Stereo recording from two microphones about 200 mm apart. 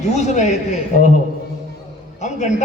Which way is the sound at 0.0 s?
35° left (ahead or behind).